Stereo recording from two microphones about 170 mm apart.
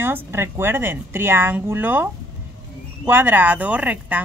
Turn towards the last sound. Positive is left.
turn(degrees=-10)  # may be behind; listen again after turning